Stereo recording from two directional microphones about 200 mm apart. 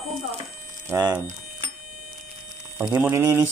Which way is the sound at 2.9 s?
15° right (ahead or behind).